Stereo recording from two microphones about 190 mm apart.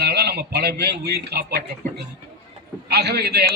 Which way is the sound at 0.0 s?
60° right (ahead or behind).